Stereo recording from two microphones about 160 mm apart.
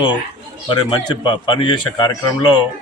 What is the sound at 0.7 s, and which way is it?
A man's voice, 25° left (ahead or behind).